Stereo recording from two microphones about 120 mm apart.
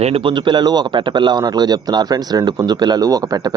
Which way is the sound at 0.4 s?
35° right (ahead or behind).